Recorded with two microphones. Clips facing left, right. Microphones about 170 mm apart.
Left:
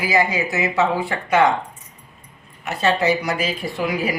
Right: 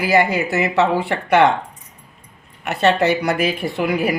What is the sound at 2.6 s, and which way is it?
A woman's voice, 65° right (ahead or behind).